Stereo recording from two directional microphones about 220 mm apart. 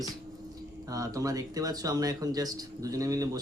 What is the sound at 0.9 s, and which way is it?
Speech, 15° right (ahead or behind).